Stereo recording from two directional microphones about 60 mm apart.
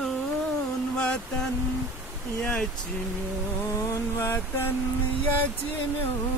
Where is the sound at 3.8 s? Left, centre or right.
Left.